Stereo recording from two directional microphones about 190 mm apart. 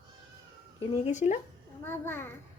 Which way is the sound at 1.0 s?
40° left (ahead or behind).